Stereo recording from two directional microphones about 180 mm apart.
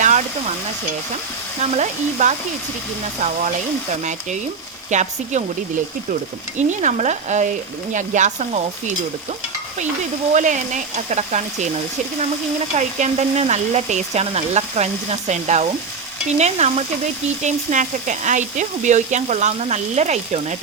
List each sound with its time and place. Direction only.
0.0 s stir: 40° right (ahead or behind)
1.7 s speech: 40° right (ahead or behind)
4.9 s speech: 40° right (ahead or behind)
6.6 s speech: 40° right (ahead or behind)
10.3 s speech: 45° right (ahead or behind)
12.7 s speech: 40° right (ahead or behind)